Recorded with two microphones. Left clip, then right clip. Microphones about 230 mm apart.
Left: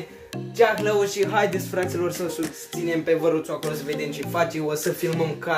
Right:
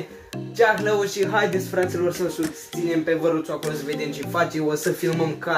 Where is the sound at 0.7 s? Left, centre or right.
Centre.